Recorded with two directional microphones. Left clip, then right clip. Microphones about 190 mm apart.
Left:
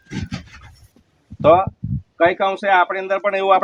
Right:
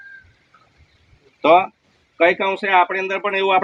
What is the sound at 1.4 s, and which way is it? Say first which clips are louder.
Speech: left 1 dB; 55° left (ahead or behind).